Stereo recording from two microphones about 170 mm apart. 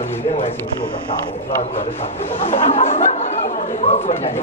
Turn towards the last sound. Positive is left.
turn(degrees=40)  # may be behind; listen again after turning